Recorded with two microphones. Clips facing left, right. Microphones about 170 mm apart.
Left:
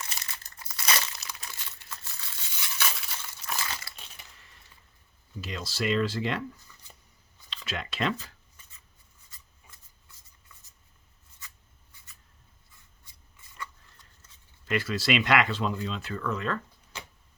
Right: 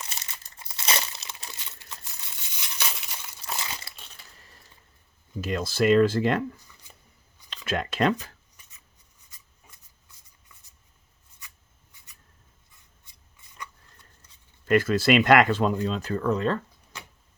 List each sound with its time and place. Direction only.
0.6 s crumpling: 25° right (ahead or behind)
5.4 s speech: 50° right (ahead or behind)
7.5 s speech: 50° right (ahead or behind)
14.7 s speech: 50° right (ahead or behind)